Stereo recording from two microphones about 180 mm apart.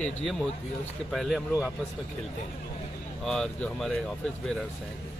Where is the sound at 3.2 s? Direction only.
5° left (ahead or behind).